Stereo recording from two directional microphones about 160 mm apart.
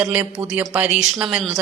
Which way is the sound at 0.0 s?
10° right (ahead or behind).